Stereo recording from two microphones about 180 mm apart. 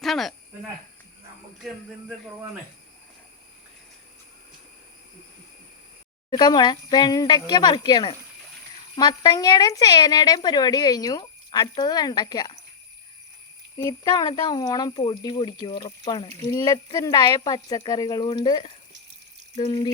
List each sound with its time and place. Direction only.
0.0 s speech: centre (ahead or behind)
6.3 s speech: 25° left (ahead or behind)
13.7 s speech: 20° left (ahead or behind)